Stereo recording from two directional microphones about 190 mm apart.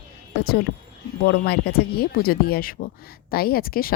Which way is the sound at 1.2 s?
55° left (ahead or behind).